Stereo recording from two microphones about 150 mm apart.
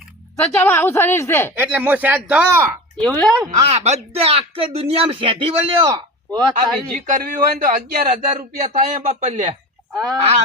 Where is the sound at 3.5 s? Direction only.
45° right (ahead or behind).